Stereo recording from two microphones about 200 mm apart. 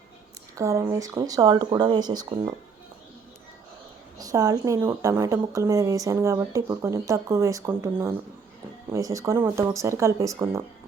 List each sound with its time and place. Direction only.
0.5 s speech: 15° right (ahead or behind)
4.2 s a woman's voice: 15° right (ahead or behind)